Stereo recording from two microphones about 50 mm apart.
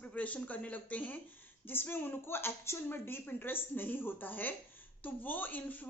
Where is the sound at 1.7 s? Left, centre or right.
Left.